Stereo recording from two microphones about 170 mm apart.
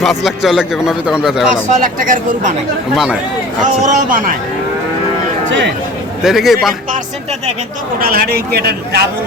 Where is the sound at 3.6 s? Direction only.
45° right (ahead or behind).